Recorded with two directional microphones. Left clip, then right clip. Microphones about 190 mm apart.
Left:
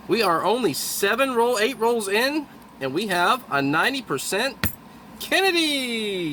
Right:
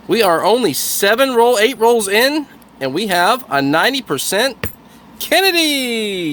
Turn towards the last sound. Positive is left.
turn(degrees=-50)  # may be behind; listen again after turning